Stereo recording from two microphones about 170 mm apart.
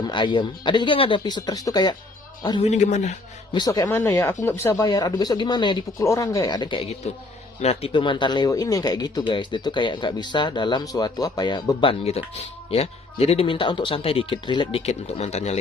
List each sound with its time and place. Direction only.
0.0 s speech: 30° left (ahead or behind)
2.6 s speech: 40° left (ahead or behind)
3.5 s speech: 25° left (ahead or behind)
3.8 s speech: 10° left (ahead or behind); by 15.5 s 40° left (ahead or behind)